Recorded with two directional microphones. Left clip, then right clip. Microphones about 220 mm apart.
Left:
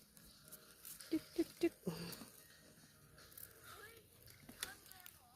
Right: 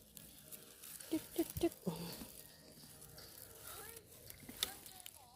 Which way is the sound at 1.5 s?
Centre (ahead or behind).